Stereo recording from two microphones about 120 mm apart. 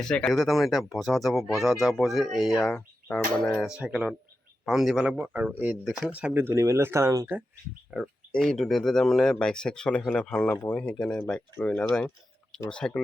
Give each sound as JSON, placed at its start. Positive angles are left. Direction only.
{"t": 0.0, "sound": "speech", "side_deg": 5}
{"t": 5.1, "sound": "speech", "side_deg": -15}
{"t": 5.8, "sound": "speech", "side_deg": 0}
{"t": 6.1, "sound": "speech", "side_deg": -10}
{"t": 7.9, "sound": "speech", "side_deg": -5}